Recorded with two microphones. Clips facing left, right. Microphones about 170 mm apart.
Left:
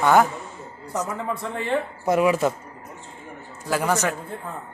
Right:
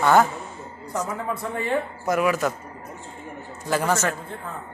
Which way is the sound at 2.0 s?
25° left (ahead or behind).